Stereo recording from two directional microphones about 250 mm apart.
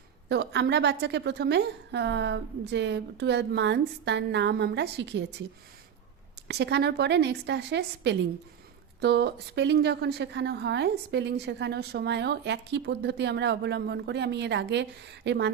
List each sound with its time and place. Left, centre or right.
0.3 s a woman's voice: right
6.5 s a woman's voice: right